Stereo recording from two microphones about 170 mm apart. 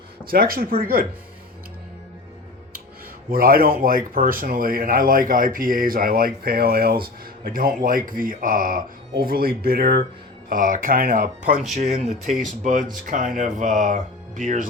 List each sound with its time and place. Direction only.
0.3 s speech: 60° right (ahead or behind)
3.3 s speech: 60° right (ahead or behind)
10.5 s speech: 55° right (ahead or behind)
11.8 s speech: 40° right (ahead or behind)